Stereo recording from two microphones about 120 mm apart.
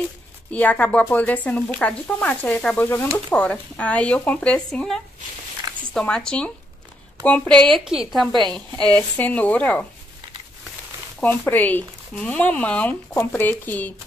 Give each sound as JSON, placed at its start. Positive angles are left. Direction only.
{"t": 0.5, "sound": "a woman's voice", "side_deg": 10}
{"t": 8.8, "sound": "speech", "side_deg": 10}
{"t": 11.1, "sound": "speech", "side_deg": 15}